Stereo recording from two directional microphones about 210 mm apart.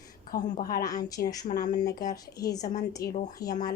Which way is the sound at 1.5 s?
30° left (ahead or behind).